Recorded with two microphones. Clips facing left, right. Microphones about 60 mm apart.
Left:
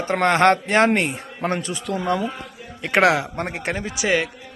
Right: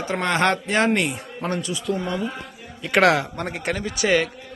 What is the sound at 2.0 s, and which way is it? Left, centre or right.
Speech, left.